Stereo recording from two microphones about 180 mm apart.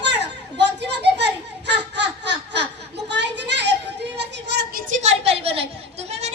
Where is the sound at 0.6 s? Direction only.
70° right (ahead or behind).